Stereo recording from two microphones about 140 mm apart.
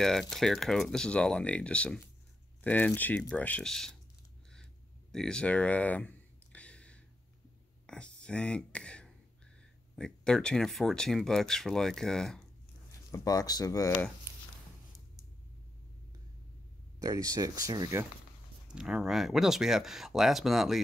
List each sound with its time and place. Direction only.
0.0 s speech: centre (ahead or behind)
5.1 s a sound: 5° left (ahead or behind)
9.9 s speech: 5° left (ahead or behind)
13.1 s speech: 25° left (ahead or behind)
17.0 s speech: 25° right (ahead or behind)
18.7 s speech: 5° right (ahead or behind)